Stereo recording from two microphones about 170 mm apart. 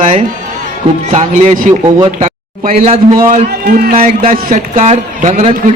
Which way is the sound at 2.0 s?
40° right (ahead or behind).